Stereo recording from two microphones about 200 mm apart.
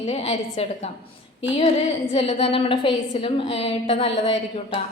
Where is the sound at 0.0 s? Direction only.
35° left (ahead or behind).